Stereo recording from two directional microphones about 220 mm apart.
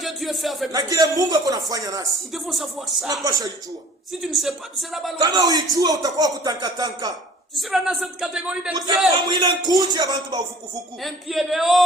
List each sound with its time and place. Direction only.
0.0 s speech: centre (ahead or behind)
0.7 s a man's voice: 15° right (ahead or behind)
2.3 s speech: centre (ahead or behind)
4.2 s speech: centre (ahead or behind)
5.2 s a man's voice: 15° right (ahead or behind)
7.5 s speech: centre (ahead or behind)
9.1 s a man's voice: 20° right (ahead or behind)
11.0 s speech: centre (ahead or behind)